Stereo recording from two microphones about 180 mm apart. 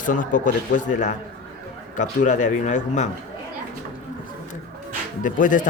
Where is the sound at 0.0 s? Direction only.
45° left (ahead or behind).